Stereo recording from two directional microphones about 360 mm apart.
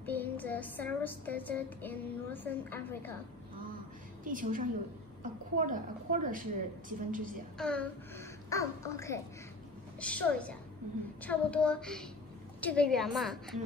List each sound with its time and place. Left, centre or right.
0.0 s speech: centre
4.2 s a woman's voice: right
7.5 s a child's voice: centre